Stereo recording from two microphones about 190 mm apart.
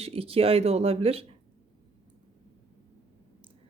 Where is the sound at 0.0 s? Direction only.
30° right (ahead or behind).